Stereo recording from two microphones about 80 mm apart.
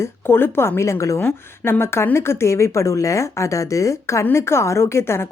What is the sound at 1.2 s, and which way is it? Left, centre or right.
Speech, left.